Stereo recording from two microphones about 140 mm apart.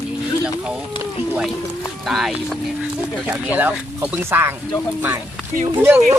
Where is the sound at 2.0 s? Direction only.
Centre (ahead or behind).